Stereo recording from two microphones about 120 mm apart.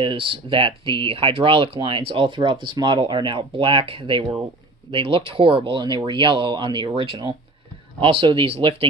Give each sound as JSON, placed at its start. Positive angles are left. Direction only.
{"t": 0.0, "sound": "speech", "side_deg": -45}